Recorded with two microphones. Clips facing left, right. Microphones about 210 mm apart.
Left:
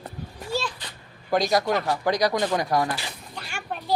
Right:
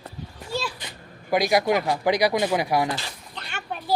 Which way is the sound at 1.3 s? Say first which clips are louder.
Right 2 dB; 10° right (ahead or behind).